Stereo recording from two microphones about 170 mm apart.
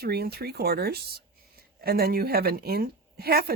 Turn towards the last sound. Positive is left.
turn(degrees=-65)  # may be behind; listen again after turning